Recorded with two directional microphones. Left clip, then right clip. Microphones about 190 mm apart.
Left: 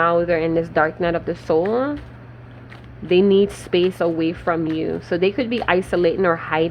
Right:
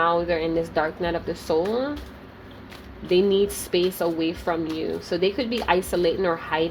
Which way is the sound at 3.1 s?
30° left (ahead or behind).